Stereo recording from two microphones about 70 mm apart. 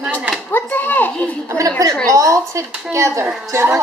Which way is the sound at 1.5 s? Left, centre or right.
Right.